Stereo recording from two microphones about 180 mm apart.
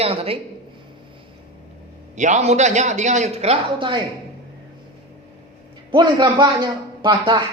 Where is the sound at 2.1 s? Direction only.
40° right (ahead or behind).